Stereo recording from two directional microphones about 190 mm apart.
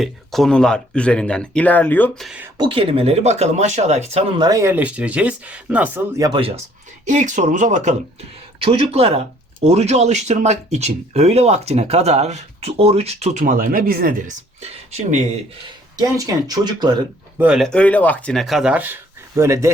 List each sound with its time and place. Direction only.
0.0 s speech: centre (ahead or behind)
2.2 s speech: 5° right (ahead or behind)
2.6 s speech: 30° right (ahead or behind)
4.4 s speech: 20° right (ahead or behind)
7.0 s speech: 40° right (ahead or behind)
13.4 s speech: 45° right (ahead or behind)
16.0 s speech: 20° right (ahead or behind)
17.4 s speech: centre (ahead or behind)